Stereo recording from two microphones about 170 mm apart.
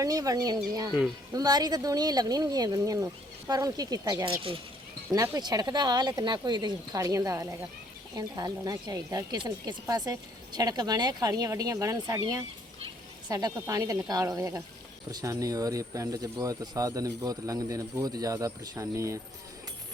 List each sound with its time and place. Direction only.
0.0 s speech: 20° right (ahead or behind)
0.9 s speech: 5° right (ahead or behind)
1.3 s a woman's voice: 20° right (ahead or behind)